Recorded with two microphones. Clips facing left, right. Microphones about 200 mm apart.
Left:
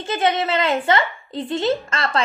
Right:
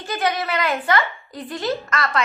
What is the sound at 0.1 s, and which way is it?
A woman's voice, 25° left (ahead or behind).